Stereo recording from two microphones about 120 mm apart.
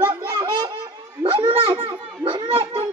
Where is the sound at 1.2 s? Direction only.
45° right (ahead or behind).